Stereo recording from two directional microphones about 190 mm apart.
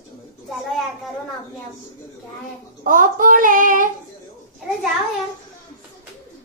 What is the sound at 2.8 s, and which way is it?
Child singing, 45° right (ahead or behind).